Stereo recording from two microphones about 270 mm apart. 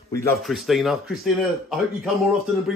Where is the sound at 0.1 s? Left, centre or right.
Centre.